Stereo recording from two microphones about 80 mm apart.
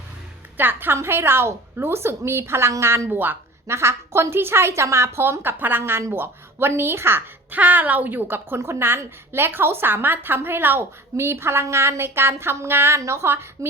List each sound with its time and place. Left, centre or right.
0.5 s a woman's voice: right